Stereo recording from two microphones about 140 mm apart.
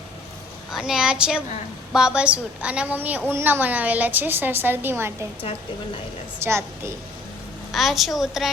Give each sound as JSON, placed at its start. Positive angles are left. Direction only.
{"t": 0.7, "sound": "a woman's voice", "side_deg": -5}
{"t": 6.4, "sound": "a woman's voice", "side_deg": -20}
{"t": 7.7, "sound": "a woman's voice", "side_deg": 0}